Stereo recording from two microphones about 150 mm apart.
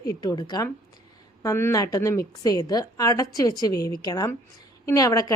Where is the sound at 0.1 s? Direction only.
25° left (ahead or behind).